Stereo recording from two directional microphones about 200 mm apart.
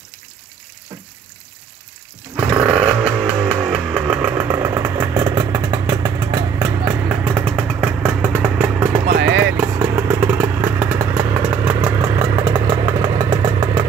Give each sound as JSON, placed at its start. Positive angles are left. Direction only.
{"t": 2.3, "sound": "vehicle", "side_deg": -5}
{"t": 8.4, "sound": "motorcycle", "side_deg": -10}
{"t": 9.0, "sound": "vehicle", "side_deg": -55}
{"t": 9.5, "sound": "motorcycle", "side_deg": -15}
{"t": 11.5, "sound": "vehicle", "side_deg": -10}